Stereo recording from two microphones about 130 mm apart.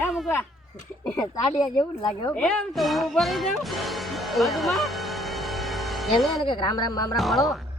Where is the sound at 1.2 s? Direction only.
35° left (ahead or behind).